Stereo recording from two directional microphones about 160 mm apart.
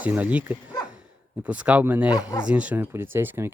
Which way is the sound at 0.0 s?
10° right (ahead or behind).